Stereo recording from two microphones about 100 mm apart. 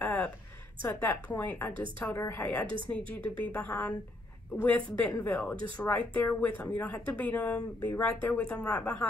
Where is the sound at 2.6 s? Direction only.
55° right (ahead or behind).